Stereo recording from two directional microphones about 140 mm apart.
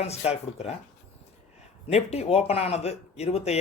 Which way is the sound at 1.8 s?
50° left (ahead or behind).